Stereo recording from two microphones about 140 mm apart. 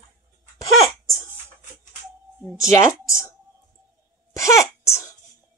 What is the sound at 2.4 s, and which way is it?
Speech, 5° right (ahead or behind).